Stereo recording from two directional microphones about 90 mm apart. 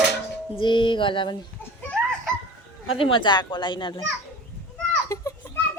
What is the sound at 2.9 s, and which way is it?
Speech, 70° left (ahead or behind).